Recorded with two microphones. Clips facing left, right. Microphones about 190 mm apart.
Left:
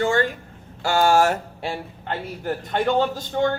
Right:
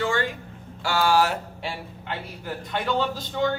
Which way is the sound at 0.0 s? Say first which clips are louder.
Left 5 dB; 45° left (ahead or behind).